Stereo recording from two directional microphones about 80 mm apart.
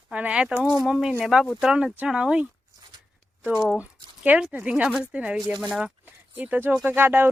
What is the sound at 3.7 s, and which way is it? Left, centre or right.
Speech, centre.